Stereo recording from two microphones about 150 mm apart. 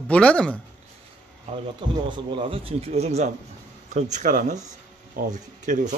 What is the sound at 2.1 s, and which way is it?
Speech, 35° right (ahead or behind).